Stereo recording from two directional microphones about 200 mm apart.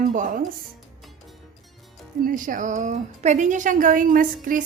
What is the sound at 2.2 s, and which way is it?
A woman's voice, 40° right (ahead or behind).